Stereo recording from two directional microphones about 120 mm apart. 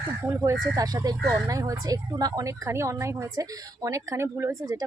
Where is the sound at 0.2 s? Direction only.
25° right (ahead or behind).